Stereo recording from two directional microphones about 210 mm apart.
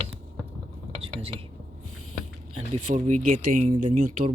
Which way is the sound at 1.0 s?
25° right (ahead or behind).